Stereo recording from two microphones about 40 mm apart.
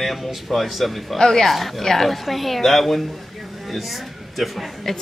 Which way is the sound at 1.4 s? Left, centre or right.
Centre.